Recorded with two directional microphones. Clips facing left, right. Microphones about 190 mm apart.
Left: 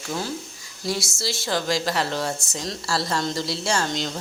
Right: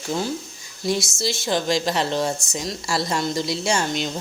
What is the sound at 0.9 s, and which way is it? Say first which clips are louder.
Speech: right 4 dB; 20° right (ahead or behind).